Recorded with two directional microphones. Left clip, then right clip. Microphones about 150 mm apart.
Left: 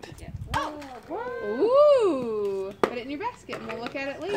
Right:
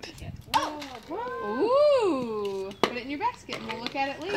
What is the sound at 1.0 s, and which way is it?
Speech, 60° right (ahead or behind).